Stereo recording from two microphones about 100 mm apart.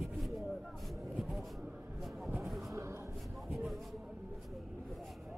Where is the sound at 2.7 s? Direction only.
30° right (ahead or behind).